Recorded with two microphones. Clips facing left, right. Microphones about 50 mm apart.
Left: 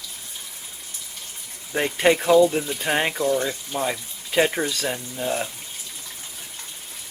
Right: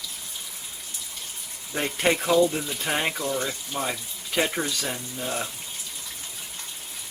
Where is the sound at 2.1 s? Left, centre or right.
Centre.